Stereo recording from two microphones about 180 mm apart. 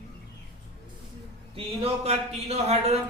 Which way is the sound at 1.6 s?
35° right (ahead or behind).